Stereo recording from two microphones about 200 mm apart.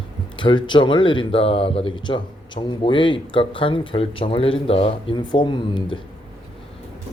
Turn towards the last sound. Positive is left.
turn(degrees=25)  # may be behind; listen again after turning